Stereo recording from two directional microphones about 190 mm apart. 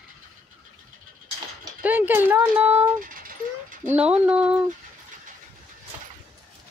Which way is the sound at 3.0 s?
45° right (ahead or behind).